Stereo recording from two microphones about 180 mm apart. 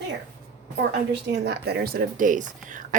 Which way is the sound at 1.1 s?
70° right (ahead or behind).